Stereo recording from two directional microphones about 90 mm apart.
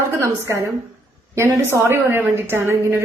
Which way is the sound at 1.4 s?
30° right (ahead or behind).